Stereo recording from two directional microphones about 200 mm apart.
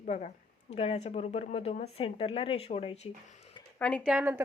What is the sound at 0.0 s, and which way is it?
Speech, 35° left (ahead or behind).